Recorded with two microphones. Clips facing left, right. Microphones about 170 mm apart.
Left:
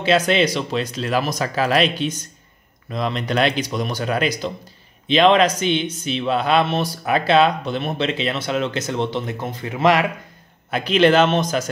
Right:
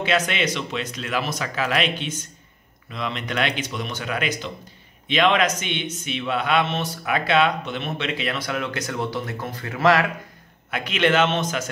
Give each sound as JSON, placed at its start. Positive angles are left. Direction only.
{"t": 0.0, "sound": "speech", "side_deg": 30}
{"t": 10.7, "sound": "speech", "side_deg": 35}